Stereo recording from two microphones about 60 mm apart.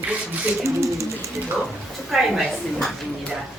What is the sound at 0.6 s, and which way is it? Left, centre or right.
Speech, right.